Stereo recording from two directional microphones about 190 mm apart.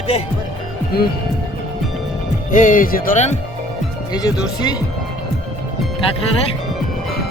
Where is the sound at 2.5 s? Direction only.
45° left (ahead or behind).